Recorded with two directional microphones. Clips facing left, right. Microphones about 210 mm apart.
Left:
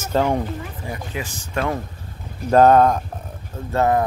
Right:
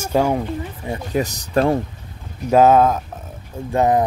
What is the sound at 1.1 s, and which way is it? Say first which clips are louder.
Speech: right 10 dB; 40° right (ahead or behind).